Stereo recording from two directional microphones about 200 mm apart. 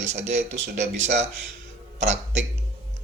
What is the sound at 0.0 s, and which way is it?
A man's voice, 35° right (ahead or behind).